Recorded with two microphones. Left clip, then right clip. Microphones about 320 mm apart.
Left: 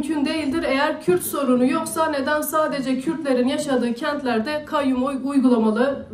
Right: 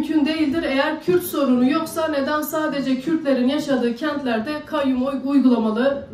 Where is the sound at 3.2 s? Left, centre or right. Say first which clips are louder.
Left 1 dB; left.